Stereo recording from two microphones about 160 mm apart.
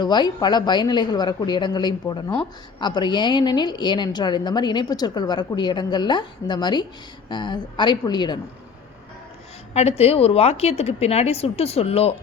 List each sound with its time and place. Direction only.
0.0 s a woman's voice: 25° left (ahead or behind)
9.7 s a woman's voice: 40° left (ahead or behind)